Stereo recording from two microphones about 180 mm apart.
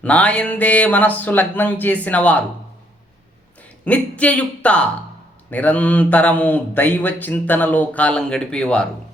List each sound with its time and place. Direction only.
0.0 s speech: 5° left (ahead or behind)
3.8 s speech: 5° left (ahead or behind)